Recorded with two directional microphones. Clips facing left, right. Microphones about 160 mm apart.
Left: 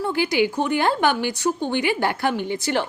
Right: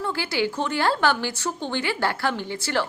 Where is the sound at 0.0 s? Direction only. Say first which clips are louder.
Left 5 dB; 15° left (ahead or behind).